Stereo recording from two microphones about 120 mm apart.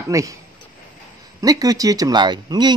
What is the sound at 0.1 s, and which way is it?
Speech, 25° right (ahead or behind).